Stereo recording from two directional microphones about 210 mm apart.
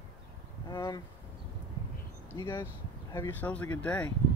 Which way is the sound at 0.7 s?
20° left (ahead or behind).